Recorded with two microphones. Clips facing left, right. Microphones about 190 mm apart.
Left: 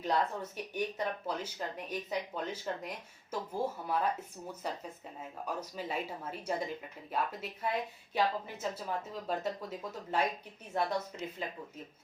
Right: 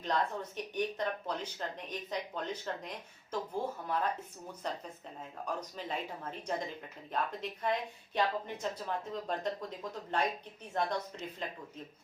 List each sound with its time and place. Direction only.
0.0 s a woman's voice: 10° left (ahead or behind)